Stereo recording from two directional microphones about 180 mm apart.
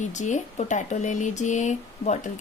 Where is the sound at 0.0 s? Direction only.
40° left (ahead or behind).